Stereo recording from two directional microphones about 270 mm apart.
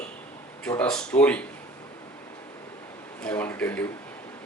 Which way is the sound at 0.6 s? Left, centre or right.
Centre.